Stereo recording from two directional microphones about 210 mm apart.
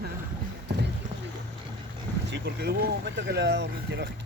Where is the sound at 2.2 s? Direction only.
55° right (ahead or behind).